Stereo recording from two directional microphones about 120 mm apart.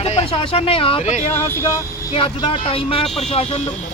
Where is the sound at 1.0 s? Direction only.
80° left.